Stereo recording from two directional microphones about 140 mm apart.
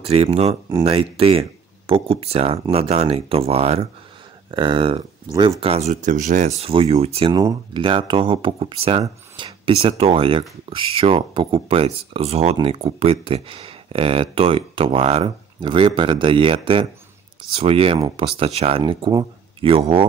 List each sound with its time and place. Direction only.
0.0 s speech: 45° right (ahead or behind)
4.5 s speech: 35° right (ahead or behind)
5.3 s speech: 25° right (ahead or behind)
5.6 s speech: 50° right (ahead or behind)
6.7 s speech: 45° right (ahead or behind)
7.3 s speech: 30° right (ahead or behind)